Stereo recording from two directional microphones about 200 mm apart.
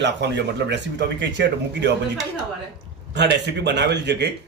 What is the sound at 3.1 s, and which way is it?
Speech, 60° right (ahead or behind).